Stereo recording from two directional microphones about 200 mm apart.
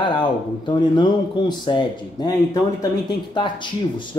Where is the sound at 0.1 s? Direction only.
25° left (ahead or behind).